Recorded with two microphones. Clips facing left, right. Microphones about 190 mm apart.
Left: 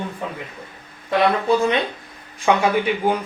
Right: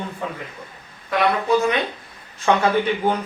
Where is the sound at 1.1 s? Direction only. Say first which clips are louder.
Left 2 dB; 30° left (ahead or behind).